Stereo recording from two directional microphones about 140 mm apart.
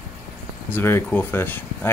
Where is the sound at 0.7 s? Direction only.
15° left (ahead or behind).